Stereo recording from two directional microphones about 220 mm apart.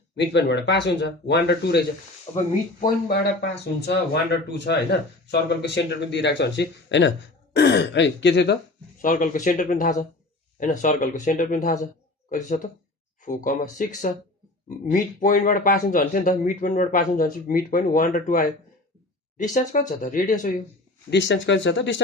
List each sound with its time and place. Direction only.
0.2 s speech: 50° left (ahead or behind)
2.3 s speech: 20° left (ahead or behind)
3.8 s speech: 50° left (ahead or behind)
9.0 s speech: 40° left (ahead or behind)
21.1 s speech: 55° left (ahead or behind)